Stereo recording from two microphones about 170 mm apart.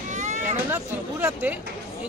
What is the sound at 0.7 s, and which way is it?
Speech, 15° right (ahead or behind).